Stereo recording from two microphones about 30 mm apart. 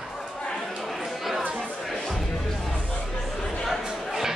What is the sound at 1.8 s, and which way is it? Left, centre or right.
Music, centre.